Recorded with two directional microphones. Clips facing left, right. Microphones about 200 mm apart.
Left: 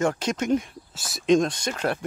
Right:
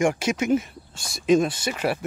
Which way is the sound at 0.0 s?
10° right (ahead or behind).